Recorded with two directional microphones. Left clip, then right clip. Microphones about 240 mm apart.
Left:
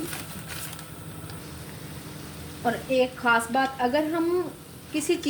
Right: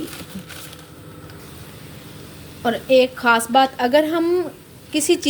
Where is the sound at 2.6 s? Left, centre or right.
Right.